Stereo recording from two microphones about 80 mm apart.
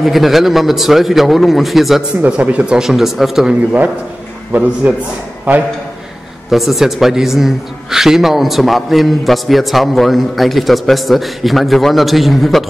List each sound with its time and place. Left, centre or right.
0.0 s a man's voice: centre
2.2 s speech: centre
4.5 s a man's voice: centre
6.5 s a man's voice: centre